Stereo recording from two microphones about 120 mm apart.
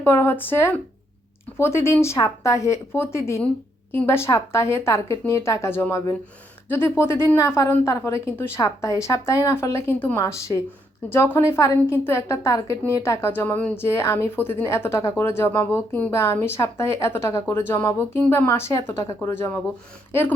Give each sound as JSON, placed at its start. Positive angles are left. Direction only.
{"t": 0.0, "sound": "a woman's voice", "side_deg": 20}
{"t": 10.2, "sound": "a woman's voice", "side_deg": 25}